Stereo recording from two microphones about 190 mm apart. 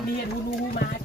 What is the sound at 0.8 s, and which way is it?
Speech, 55° left (ahead or behind).